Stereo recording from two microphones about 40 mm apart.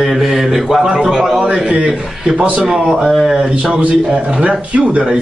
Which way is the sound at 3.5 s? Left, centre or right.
Right.